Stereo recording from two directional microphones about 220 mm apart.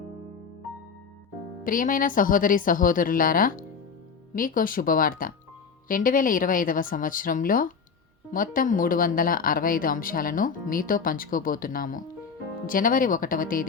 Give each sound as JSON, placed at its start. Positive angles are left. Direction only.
{"t": 1.6, "sound": "speech", "side_deg": 40}